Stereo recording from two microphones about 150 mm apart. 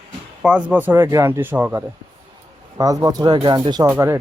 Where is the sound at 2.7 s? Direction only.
25° right (ahead or behind).